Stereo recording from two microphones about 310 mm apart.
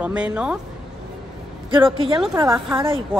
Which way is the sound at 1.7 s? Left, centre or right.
Centre.